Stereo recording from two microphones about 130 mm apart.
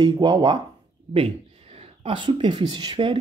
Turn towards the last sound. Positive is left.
turn(degrees=-35)  # may be behind; listen again after turning